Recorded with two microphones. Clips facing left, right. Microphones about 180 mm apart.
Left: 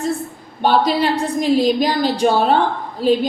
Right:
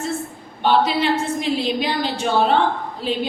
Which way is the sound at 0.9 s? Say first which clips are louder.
Left 2 dB; 40° left (ahead or behind).